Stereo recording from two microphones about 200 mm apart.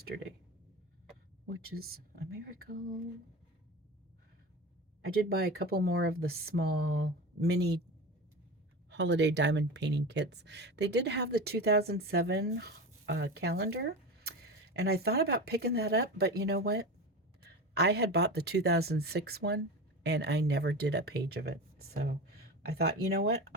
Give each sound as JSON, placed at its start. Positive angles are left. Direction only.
{"t": 0.1, "sound": "speech", "side_deg": -55}
{"t": 1.5, "sound": "speech", "side_deg": -50}
{"t": 5.0, "sound": "speech", "side_deg": -50}
{"t": 8.9, "sound": "speech", "side_deg": -60}